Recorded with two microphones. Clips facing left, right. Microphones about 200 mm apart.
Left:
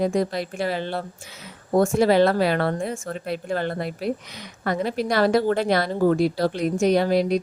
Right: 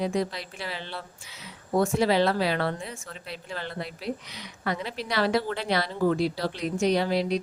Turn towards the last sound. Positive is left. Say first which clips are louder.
# left 5 dB
turn(degrees=45)  # may be behind; listen again after turning